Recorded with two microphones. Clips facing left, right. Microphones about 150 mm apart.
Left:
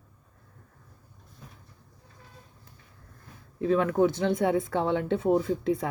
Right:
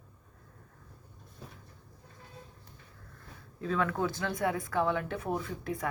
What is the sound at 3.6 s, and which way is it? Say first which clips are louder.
Speech: left 8 dB; 20° left (ahead or behind).